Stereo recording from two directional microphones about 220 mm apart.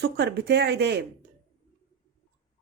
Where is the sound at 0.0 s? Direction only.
50° right (ahead or behind).